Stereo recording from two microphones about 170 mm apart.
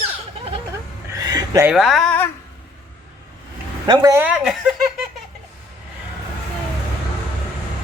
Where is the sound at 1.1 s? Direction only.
20° right (ahead or behind).